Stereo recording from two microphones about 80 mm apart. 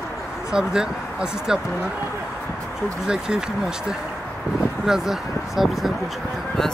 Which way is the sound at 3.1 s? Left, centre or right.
Centre.